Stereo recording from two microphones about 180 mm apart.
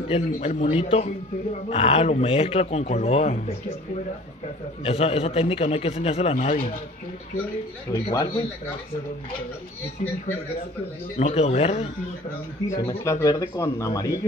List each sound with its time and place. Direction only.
0.1 s speech: 35° left (ahead or behind)
4.8 s speech: 35° left (ahead or behind)
7.9 s speech: 20° left (ahead or behind)
11.1 s speech: 35° left (ahead or behind)
12.6 s speech: 15° left (ahead or behind)